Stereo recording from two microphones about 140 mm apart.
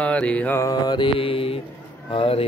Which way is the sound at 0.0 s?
10° left (ahead or behind).